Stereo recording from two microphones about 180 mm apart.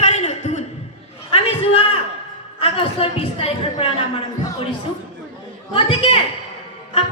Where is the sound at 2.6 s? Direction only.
30° left (ahead or behind).